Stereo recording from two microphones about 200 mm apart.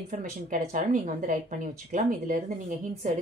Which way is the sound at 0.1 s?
40° right (ahead or behind).